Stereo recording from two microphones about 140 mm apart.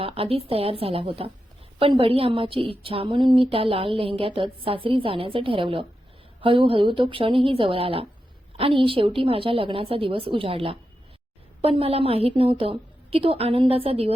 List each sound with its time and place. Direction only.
0.0 s a woman's voice: 45° right (ahead or behind)